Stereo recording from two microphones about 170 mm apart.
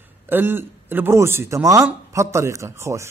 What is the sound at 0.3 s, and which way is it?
A man's voice, 10° right (ahead or behind).